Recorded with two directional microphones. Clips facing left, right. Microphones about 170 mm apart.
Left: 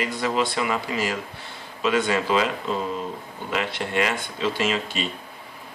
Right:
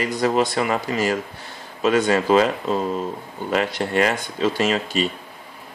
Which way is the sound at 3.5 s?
40° right (ahead or behind).